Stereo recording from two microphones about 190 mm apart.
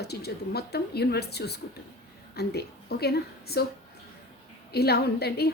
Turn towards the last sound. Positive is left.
turn(degrees=60)  # may be behind; listen again after turning